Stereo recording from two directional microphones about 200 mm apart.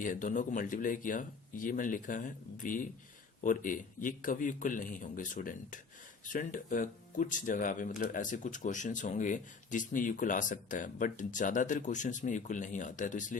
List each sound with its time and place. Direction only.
0.0 s speech: 40° left (ahead or behind)